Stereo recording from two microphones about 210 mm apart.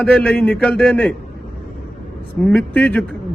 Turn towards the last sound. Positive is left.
turn(degrees=5)  # may be behind; listen again after turning